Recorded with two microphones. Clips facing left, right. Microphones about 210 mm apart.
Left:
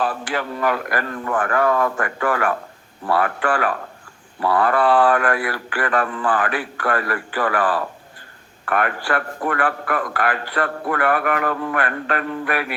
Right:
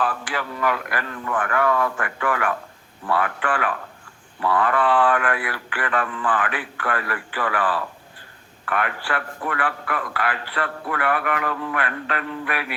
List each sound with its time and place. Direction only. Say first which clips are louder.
0.0 s a man's voice: left 3 dB; 40° left (ahead or behind)